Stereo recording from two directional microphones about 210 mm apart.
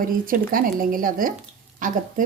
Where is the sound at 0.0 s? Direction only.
40° right (ahead or behind).